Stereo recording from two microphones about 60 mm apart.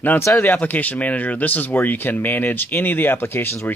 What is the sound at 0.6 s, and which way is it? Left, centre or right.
Speech, left.